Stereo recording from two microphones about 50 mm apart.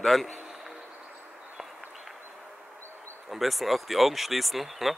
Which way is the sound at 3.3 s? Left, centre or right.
Centre.